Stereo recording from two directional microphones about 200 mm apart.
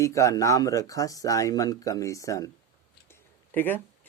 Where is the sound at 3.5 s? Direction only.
10° left (ahead or behind).